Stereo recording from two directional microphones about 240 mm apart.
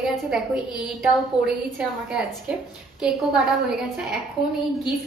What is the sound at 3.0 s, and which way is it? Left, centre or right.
Speech, centre.